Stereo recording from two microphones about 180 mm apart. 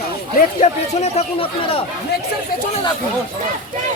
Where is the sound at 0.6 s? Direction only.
35° left (ahead or behind).